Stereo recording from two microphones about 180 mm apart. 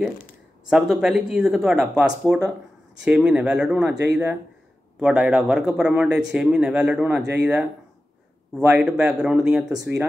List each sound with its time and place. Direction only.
0.7 s speech: centre (ahead or behind)
5.0 s speech: 5° right (ahead or behind)
9.7 s speech: 20° right (ahead or behind)